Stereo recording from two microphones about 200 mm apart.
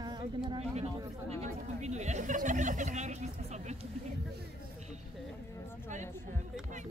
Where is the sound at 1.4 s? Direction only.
35° right (ahead or behind).